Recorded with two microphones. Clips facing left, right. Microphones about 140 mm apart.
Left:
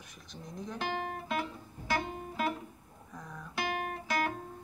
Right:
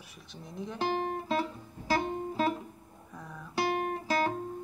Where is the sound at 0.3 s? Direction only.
5° right (ahead or behind).